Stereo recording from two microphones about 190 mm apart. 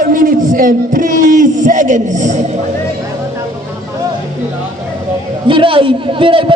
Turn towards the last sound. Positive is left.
turn(degrees=-25)  # may be behind; listen again after turning